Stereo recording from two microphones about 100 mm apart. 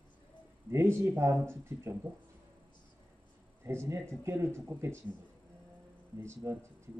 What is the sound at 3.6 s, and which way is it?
Speech, 25° right (ahead or behind).